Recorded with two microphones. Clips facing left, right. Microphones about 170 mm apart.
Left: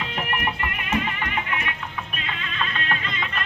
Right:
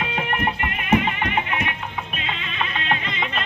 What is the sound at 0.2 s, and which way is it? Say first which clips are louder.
Music: right 2 dB; 25° right (ahead or behind).